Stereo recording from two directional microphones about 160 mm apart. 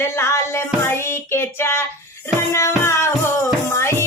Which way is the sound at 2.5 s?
15° left (ahead or behind).